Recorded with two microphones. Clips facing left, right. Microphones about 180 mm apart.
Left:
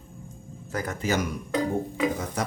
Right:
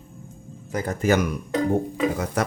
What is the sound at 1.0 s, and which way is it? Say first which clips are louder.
Speech: right 7 dB; 60° right (ahead or behind).